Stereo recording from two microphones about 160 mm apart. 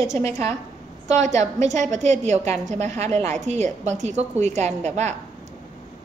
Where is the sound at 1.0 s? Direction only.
45° right (ahead or behind).